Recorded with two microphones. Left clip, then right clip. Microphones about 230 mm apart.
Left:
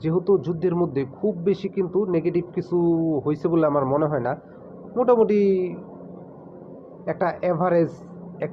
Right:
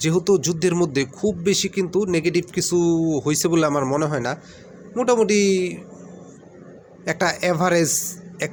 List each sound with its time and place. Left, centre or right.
0.0 s speech: right
7.0 s speech: right